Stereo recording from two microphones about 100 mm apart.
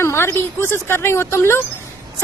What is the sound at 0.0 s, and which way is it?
Speech, 25° left (ahead or behind).